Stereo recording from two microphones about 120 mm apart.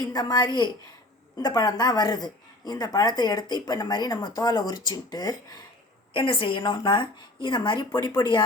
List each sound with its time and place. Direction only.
0.1 s speech: 35° left (ahead or behind)
6.1 s speech: 45° left (ahead or behind)